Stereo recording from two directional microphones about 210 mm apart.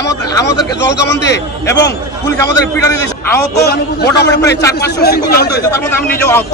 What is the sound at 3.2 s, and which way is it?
Speech, 15° left (ahead or behind).